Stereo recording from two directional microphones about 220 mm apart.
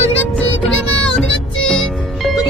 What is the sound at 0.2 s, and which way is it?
Music, 5° left (ahead or behind).